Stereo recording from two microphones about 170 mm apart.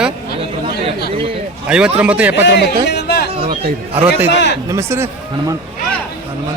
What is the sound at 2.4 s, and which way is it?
Speech, 80° left.